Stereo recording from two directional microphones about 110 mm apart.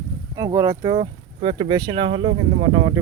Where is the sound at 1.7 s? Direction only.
40° right (ahead or behind).